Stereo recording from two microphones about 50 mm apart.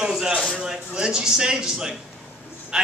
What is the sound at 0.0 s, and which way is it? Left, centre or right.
A man's voice, centre.